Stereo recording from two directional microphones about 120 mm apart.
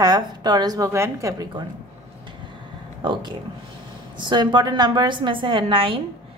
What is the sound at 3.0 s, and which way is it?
A woman's voice, 40° right (ahead or behind).